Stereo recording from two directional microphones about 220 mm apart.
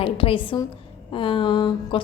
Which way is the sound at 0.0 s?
25° left (ahead or behind).